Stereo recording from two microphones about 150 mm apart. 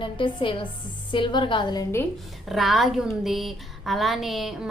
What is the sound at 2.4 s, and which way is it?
Speech, centre (ahead or behind).